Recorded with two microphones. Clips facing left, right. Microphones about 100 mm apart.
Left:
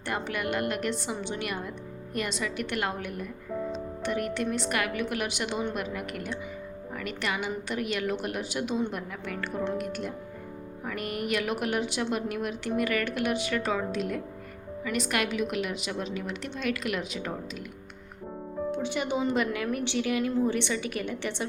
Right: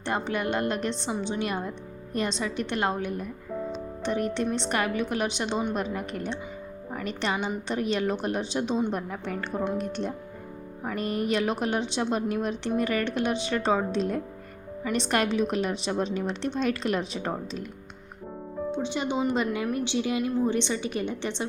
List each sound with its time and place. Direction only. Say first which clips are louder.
0.0 s a woman's voice: right 3 dB; 25° right (ahead or behind)
18.9 s a woman's voice: right 1 dB; 25° right (ahead or behind)